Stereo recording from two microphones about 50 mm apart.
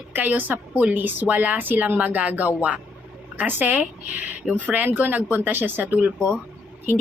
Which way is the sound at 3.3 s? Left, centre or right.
Right.